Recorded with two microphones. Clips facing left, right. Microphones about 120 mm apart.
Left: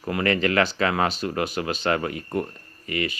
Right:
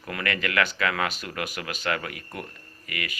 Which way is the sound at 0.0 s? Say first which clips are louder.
Left 7 dB; 30° left (ahead or behind).